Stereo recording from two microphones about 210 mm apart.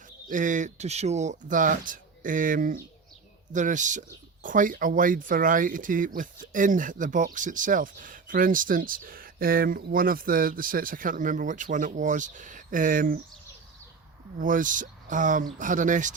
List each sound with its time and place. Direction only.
0.3 s speech: 40° right (ahead or behind)
14.3 s speech: 40° right (ahead or behind)